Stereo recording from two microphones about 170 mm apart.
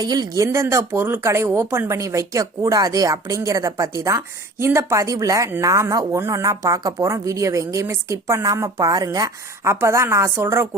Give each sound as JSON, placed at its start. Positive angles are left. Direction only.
{"t": 0.0, "sound": "speech", "side_deg": -25}